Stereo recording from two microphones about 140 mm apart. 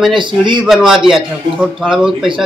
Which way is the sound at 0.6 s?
5° right (ahead or behind).